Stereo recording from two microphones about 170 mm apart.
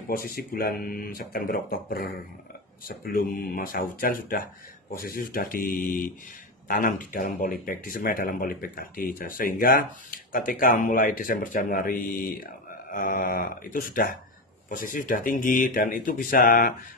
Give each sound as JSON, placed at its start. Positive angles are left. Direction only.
{"t": 0.1, "sound": "speech", "side_deg": 60}